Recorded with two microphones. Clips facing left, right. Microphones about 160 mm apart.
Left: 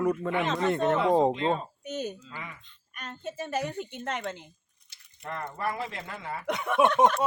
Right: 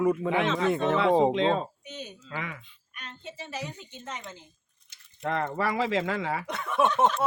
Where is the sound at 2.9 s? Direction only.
45° left (ahead or behind); by 4.5 s 65° left (ahead or behind).